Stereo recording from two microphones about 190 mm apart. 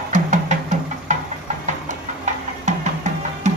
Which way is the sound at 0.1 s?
40° right (ahead or behind).